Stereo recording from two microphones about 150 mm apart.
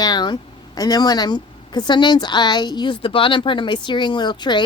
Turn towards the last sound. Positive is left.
turn(degrees=30)  # may be behind; listen again after turning